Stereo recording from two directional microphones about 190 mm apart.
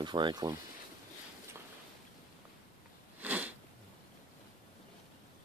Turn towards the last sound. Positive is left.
turn(degrees=-10)  # may be behind; listen again after turning